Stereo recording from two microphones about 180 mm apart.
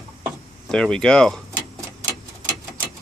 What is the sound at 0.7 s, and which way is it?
Speech, 5° left (ahead or behind).